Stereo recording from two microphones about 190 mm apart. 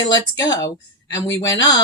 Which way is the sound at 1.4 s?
20° left (ahead or behind).